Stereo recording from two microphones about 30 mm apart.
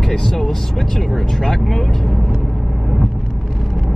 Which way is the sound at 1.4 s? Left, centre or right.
Centre.